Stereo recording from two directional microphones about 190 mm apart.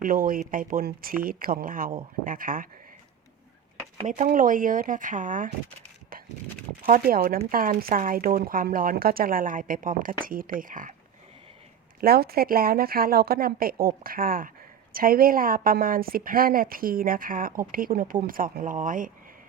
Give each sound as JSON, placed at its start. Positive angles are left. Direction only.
{"t": 0.0, "sound": "a woman's voice", "side_deg": -50}
{"t": 4.0, "sound": "a woman's voice", "side_deg": -40}
{"t": 6.8, "sound": "a woman's voice", "side_deg": -50}
{"t": 11.9, "sound": "a woman's voice", "side_deg": -55}